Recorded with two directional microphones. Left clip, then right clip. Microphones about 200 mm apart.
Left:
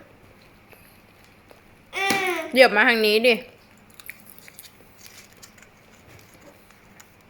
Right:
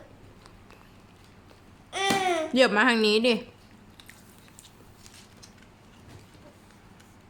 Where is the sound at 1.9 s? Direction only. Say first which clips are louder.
Left 2 dB; 20° right (ahead or behind).